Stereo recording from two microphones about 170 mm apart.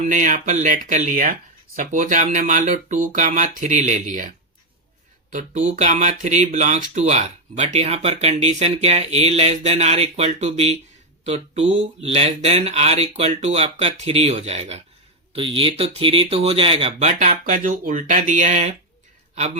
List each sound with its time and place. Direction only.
0.0 s speech: 50° right (ahead or behind)
5.3 s speech: 45° right (ahead or behind)